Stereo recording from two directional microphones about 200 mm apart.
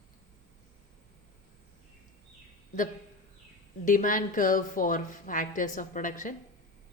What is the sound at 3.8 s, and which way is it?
Speech, 40° left (ahead or behind).